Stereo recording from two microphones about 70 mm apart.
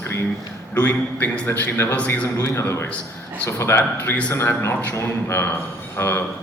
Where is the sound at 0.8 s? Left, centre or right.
Left.